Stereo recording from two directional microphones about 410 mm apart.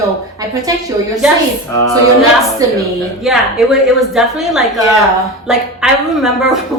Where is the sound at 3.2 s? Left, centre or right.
Centre.